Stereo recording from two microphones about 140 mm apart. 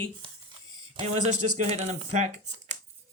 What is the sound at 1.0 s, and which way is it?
Speech, 50° right (ahead or behind).